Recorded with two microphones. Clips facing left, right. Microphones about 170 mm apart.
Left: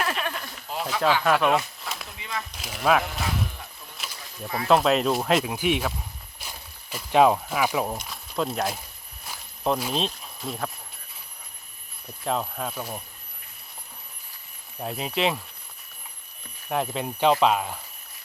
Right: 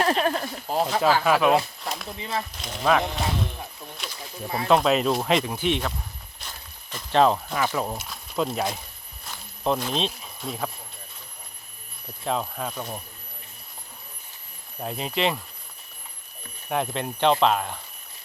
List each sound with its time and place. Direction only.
0.0 s speech: 35° right (ahead or behind)
1.2 s speech: 5° right (ahead or behind)
1.5 s speech: 35° right (ahead or behind)
2.6 s speech: 5° left (ahead or behind)
4.0 s a sound: centre (ahead or behind)
4.4 s speech: 30° right (ahead or behind)
4.7 s speech: centre (ahead or behind)
9.2 s a sound: 5° left (ahead or behind)
12.2 s speech: centre (ahead or behind)
14.8 s speech: centre (ahead or behind)
16.6 s speech: centre (ahead or behind)